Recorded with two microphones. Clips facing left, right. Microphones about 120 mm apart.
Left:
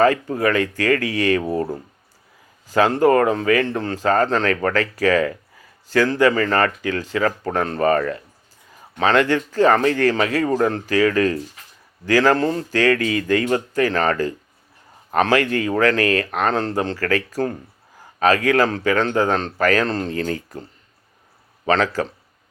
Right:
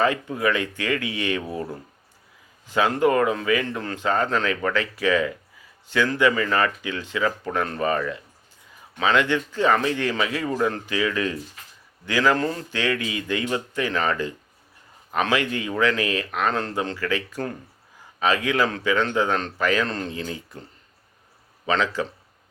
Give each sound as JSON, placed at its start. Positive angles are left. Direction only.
{"t": 0.0, "sound": "speech", "side_deg": 40}
{"t": 2.6, "sound": "speech", "side_deg": 40}
{"t": 20.2, "sound": "speech", "side_deg": 55}
{"t": 21.7, "sound": "speech", "side_deg": 40}